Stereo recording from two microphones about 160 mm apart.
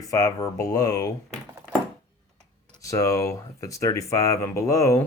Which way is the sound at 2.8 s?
20° left (ahead or behind).